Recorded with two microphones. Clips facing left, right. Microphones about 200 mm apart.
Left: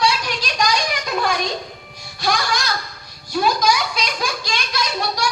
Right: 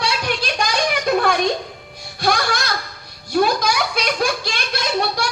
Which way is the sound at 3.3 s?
55° right (ahead or behind).